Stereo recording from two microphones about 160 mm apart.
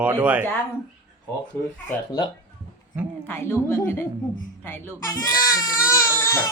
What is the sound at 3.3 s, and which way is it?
A woman's voice, 15° left (ahead or behind).